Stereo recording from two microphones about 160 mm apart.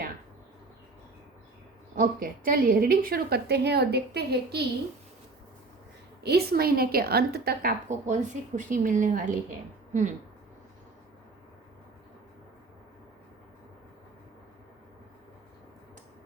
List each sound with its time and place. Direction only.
2.0 s a woman's voice: 65° right (ahead or behind); by 4.6 s 90° right
6.2 s a woman's voice: 75° right (ahead or behind)
7.9 s speech: 50° right (ahead or behind)